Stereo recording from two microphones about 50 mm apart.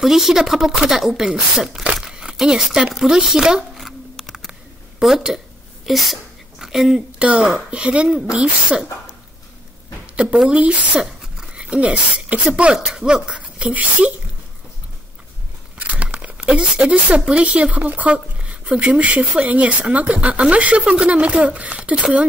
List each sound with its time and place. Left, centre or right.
0.0 s speech: centre
3.8 s a sound: centre
5.0 s speech: centre
6.6 s a sound: centre
7.2 s speech: right
10.1 s a woman's voice: right
11.0 s a sound: centre
11.5 s speech: right
15.8 s speech: right